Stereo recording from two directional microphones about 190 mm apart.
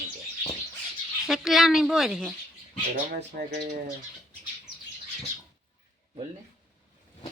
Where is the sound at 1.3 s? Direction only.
Centre (ahead or behind).